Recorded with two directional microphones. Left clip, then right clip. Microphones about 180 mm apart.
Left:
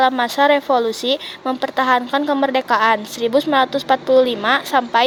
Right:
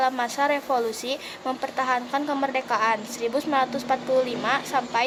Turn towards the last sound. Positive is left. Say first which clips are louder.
# left 8 dB
turn(degrees=35)  # may be behind; listen again after turning